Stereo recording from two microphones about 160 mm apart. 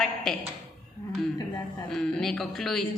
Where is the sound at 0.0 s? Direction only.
5° left (ahead or behind).